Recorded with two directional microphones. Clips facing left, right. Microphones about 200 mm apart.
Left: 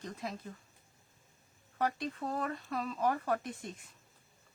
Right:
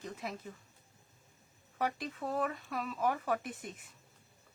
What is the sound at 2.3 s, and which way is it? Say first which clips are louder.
Speech: right 1 dB; 5° right (ahead or behind).